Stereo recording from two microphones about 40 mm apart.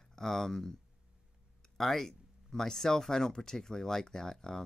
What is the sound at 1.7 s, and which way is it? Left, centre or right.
Speech, centre.